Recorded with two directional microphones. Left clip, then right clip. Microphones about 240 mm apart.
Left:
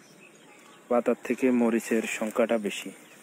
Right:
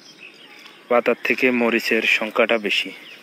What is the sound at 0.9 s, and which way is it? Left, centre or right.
Speech, centre.